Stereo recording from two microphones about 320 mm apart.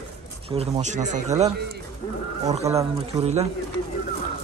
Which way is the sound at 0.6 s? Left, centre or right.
Right.